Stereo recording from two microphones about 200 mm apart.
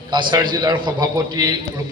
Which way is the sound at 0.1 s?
20° right (ahead or behind).